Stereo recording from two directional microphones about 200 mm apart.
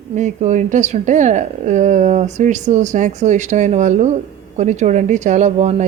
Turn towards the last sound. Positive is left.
turn(degrees=-35)  # may be behind; listen again after turning